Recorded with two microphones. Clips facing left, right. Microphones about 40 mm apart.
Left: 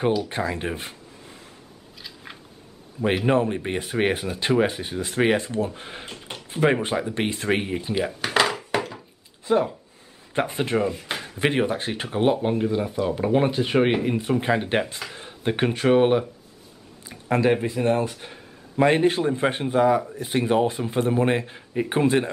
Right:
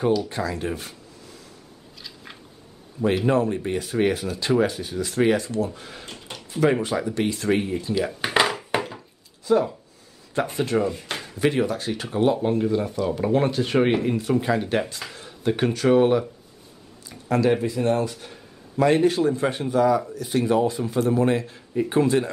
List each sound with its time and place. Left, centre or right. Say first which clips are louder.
0.3 s a sound: even; left
3.3 s speech: even; left
8.3 s a sound: even; centre
9.5 s speech: right 1 dB; left
10.9 s speech: even; centre
11.3 s speech: even; left; by 14.1 s centre
14.4 s speech: even; left
17.1 s a sound: even; left
17.5 s speech: even; left